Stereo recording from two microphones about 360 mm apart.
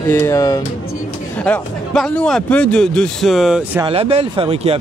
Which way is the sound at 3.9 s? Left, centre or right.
Centre.